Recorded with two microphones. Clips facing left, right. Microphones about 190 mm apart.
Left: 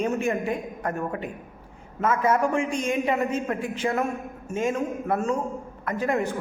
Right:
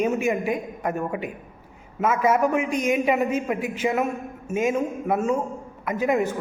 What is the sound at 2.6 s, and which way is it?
Speech, 30° left (ahead or behind).